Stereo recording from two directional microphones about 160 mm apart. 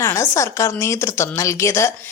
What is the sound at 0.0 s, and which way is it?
Speech, 20° left (ahead or behind).